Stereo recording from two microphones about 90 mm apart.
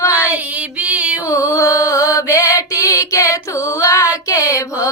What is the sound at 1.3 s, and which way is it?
Mantra, 35° left (ahead or behind).